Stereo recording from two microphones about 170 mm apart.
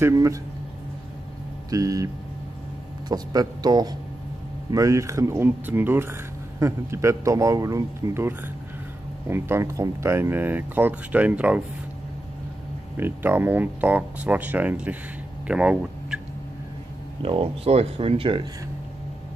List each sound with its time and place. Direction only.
0.0 s speech: 20° right (ahead or behind)
1.7 s speech: 20° right (ahead or behind)
3.1 s speech: 25° right (ahead or behind); by 11.6 s 5° right (ahead or behind)
12.9 s speech: 10° right (ahead or behind)
15.4 s a sound: 5° right (ahead or behind)
17.2 s speech: 35° right (ahead or behind)